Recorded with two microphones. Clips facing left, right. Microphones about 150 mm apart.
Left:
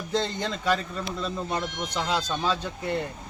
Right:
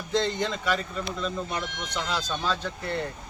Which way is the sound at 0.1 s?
35° left (ahead or behind).